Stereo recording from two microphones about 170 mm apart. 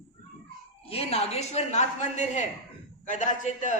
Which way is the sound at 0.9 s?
35° left (ahead or behind).